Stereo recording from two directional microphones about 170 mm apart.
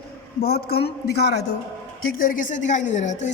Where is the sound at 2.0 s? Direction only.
60° left (ahead or behind).